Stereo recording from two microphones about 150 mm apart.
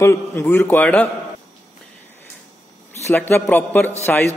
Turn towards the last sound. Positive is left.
turn(degrees=10)  # may be behind; listen again after turning